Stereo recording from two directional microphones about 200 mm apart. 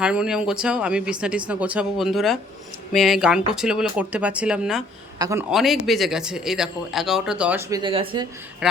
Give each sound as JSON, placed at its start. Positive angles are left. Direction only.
{"t": 0.0, "sound": "a man's voice", "side_deg": -5}
{"t": 5.5, "sound": "speech", "side_deg": -5}
{"t": 7.7, "sound": "speech", "side_deg": -25}
{"t": 8.6, "sound": "speech", "side_deg": -5}